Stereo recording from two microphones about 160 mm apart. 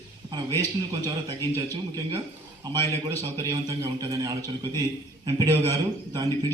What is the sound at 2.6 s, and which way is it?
A man's voice, 25° right (ahead or behind).